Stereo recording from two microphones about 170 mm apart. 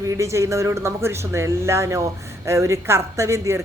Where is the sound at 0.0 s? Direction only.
20° right (ahead or behind).